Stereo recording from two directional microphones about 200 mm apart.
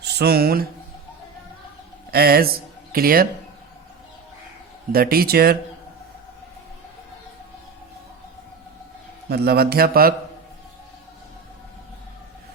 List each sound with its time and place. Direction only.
0.0 s speech: 55° right (ahead or behind)
2.0 s a man's voice: 50° right (ahead or behind)
4.9 s a man's voice: 50° right (ahead or behind)
9.3 s a man's voice: 50° right (ahead or behind)